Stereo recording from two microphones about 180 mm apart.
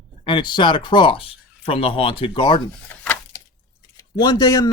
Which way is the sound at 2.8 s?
10° left (ahead or behind).